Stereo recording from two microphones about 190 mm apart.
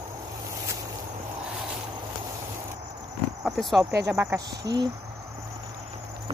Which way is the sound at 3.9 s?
15° right (ahead or behind).